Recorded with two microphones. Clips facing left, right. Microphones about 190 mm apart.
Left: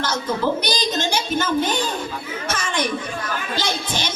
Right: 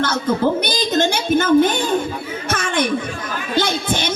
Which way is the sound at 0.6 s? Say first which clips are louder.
Right 5 dB; 55° right (ahead or behind).